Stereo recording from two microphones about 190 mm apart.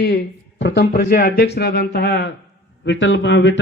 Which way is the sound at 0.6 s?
65° left (ahead or behind).